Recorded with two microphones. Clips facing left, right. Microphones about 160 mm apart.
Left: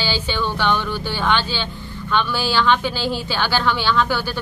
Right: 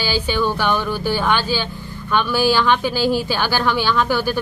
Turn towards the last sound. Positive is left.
turn(degrees=-10)  # may be behind; listen again after turning